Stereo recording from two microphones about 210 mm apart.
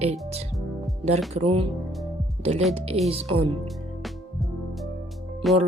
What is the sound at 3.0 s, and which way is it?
Speech, 30° right (ahead or behind).